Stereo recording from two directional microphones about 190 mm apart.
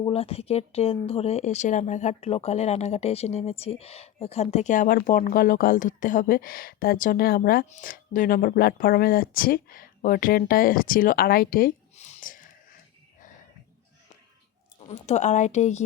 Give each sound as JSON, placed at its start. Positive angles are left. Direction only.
{"t": 0.0, "sound": "speech", "side_deg": 30}
{"t": 11.9, "sound": "a sound", "side_deg": 35}
{"t": 14.8, "sound": "speech", "side_deg": 35}